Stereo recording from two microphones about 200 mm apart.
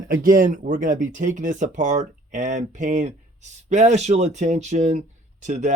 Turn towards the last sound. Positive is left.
turn(degrees=-35)  # may be behind; listen again after turning